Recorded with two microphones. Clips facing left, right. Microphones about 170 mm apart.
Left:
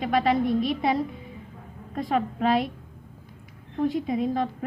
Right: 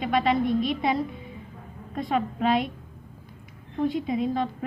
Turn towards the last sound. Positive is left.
turn(degrees=40)  # may be behind; listen again after turning